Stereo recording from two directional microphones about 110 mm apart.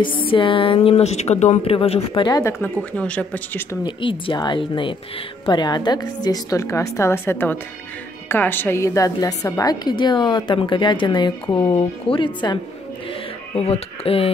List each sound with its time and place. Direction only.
0.0 s speech: 50° left (ahead or behind)
2.2 s a woman's voice: 35° left (ahead or behind)
2.6 s speech: 10° left (ahead or behind)
3.8 s a woman's voice: 50° left (ahead or behind)
13.6 s speech: 65° left (ahead or behind)